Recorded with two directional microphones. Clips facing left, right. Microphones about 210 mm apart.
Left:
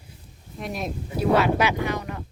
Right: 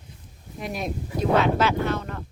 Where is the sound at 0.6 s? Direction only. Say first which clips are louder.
Even; centre (ahead or behind).